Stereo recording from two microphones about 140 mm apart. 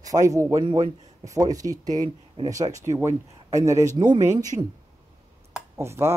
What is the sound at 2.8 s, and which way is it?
Speech, 20° right (ahead or behind).